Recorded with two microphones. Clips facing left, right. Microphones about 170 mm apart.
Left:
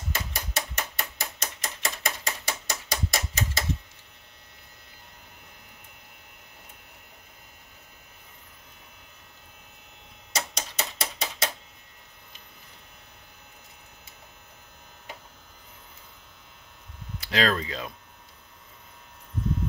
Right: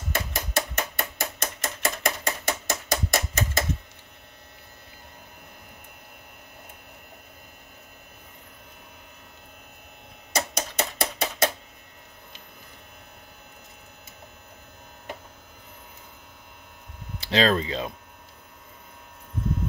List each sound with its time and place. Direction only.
0.1 s a sound: 55° right (ahead or behind)
10.3 s typewriter: 50° right (ahead or behind)
17.2 s speech: 25° right (ahead or behind)